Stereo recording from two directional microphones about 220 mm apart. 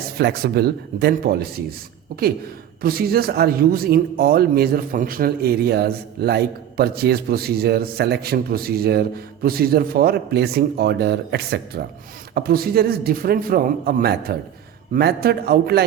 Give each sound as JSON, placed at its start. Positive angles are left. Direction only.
{"t": 0.2, "sound": "speech", "side_deg": -45}
{"t": 2.8, "sound": "speech", "side_deg": -45}